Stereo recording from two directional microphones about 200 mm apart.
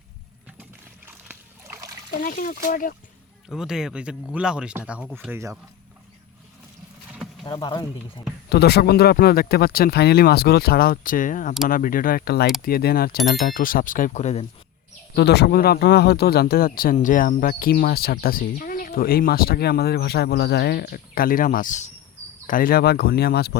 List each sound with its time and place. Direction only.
1.0 s splash: 10° right (ahead or behind)
2.0 s speech: 45° left (ahead or behind)
3.5 s speech: 5° right (ahead or behind)
5.3 s speech: 15° right (ahead or behind)
7.4 s speech: 20° left (ahead or behind)
8.4 s speech: 55° left (ahead or behind); by 14.4 s 35° left (ahead or behind)
15.1 s speech: 55° left (ahead or behind)